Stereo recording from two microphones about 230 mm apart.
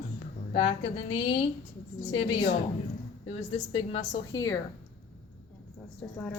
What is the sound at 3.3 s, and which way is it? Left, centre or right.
Speech, left.